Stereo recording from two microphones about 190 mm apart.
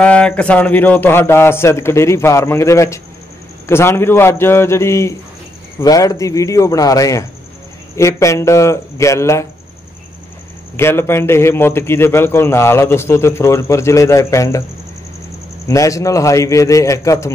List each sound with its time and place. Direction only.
0.0 s a man's voice: 5° left (ahead or behind)
10.8 s a man's voice: 15° left (ahead or behind)
15.6 s a man's voice: 15° left (ahead or behind)